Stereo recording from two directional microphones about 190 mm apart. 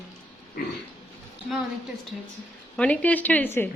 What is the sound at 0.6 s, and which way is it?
Pig, 50° left (ahead or behind).